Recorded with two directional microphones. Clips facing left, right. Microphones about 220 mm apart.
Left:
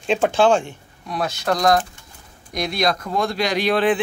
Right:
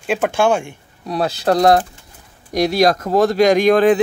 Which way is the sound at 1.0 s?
35° right (ahead or behind).